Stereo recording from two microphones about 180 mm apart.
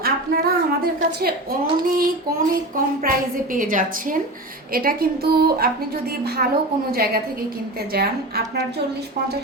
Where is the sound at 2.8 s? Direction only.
50° right (ahead or behind).